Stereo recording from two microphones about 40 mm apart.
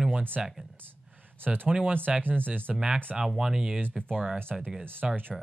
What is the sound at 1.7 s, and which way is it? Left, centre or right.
Speech, right.